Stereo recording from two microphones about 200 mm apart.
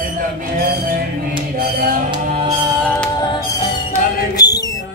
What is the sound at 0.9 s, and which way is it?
Music, 45° right (ahead or behind).